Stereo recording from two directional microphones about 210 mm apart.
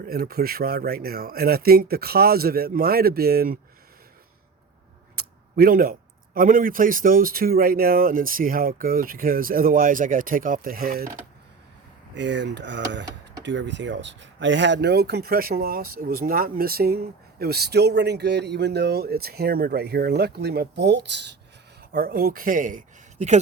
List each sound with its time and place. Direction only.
0.0 s speech: 45° right (ahead or behind)
5.1 s speech: 45° right (ahead or behind)
12.1 s speech: 55° right (ahead or behind); by 23.4 s 35° right (ahead or behind)